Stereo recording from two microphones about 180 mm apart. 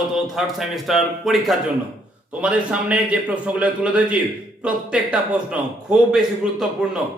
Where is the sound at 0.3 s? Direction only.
Centre (ahead or behind).